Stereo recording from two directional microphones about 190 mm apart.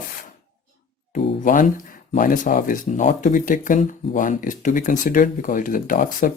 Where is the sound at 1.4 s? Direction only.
45° left (ahead or behind).